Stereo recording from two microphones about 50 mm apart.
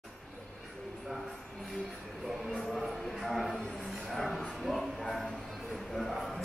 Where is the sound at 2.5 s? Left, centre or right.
Centre.